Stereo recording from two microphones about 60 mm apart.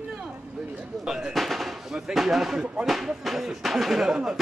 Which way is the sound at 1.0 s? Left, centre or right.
Centre.